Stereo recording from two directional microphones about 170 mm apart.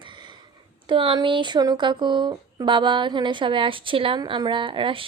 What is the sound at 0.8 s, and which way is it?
Speech, 30° right (ahead or behind).